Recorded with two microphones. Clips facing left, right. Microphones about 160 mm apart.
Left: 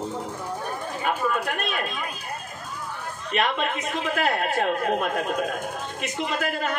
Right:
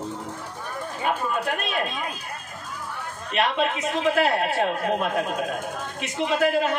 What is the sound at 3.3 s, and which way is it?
A man's voice, 45° left (ahead or behind).